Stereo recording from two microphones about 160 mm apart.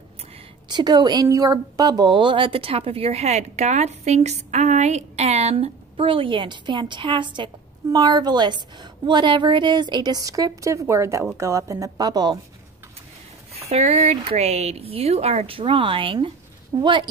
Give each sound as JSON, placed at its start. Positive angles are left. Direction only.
{"t": 0.7, "sound": "a woman's voice", "side_deg": -25}
{"t": 13.5, "sound": "a woman's voice", "side_deg": -40}